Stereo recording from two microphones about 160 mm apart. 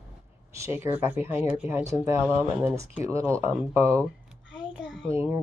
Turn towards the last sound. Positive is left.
turn(degrees=-5)  # may be behind; listen again after turning